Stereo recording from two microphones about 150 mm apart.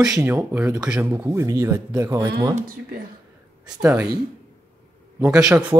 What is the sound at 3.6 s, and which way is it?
Speech, 10° right (ahead or behind).